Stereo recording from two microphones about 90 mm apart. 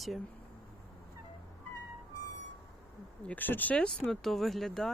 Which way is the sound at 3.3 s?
20° left (ahead or behind).